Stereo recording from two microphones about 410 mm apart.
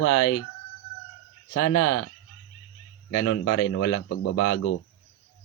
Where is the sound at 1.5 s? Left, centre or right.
Left.